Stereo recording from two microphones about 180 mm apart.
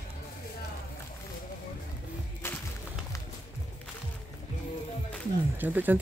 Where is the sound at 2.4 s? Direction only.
15° left (ahead or behind).